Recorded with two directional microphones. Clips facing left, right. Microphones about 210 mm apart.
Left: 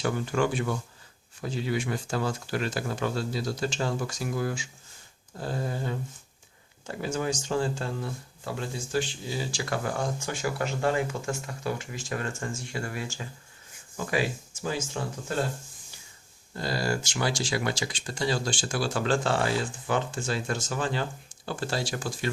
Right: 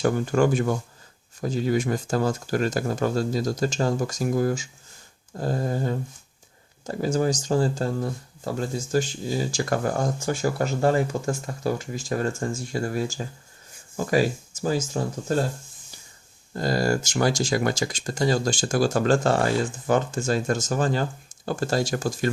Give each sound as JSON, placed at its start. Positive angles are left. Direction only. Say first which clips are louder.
{"t": 0.0, "sound": "speech", "louder": "right 6 dB", "side_deg": -45}
{"t": 16.6, "sound": "speech", "louder": "right 6 dB", "side_deg": -45}